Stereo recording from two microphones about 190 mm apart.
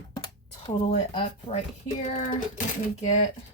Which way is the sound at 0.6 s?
30° left (ahead or behind).